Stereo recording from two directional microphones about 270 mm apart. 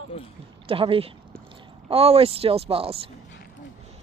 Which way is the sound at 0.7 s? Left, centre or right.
Centre.